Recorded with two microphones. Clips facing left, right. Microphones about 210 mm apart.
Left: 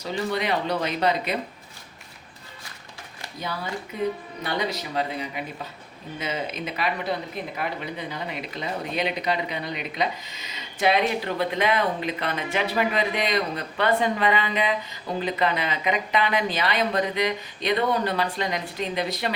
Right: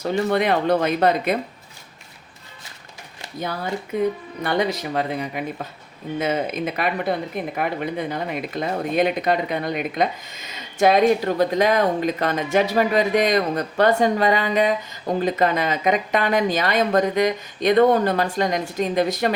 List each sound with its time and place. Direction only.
0.0 s speech: 55° right (ahead or behind)
4.4 s speech: 55° right (ahead or behind)